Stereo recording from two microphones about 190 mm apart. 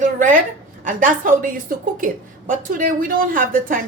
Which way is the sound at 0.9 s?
45° right (ahead or behind).